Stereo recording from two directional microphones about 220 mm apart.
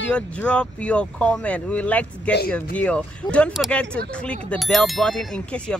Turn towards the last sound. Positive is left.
turn(degrees=5)  # may be behind; listen again after turning